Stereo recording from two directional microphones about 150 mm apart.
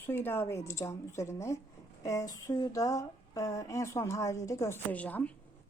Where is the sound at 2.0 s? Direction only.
20° left (ahead or behind).